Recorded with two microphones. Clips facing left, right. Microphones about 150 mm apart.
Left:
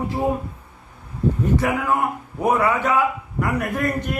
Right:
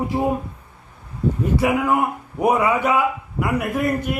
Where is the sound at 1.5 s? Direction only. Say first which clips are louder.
Right 2 dB; 10° right (ahead or behind).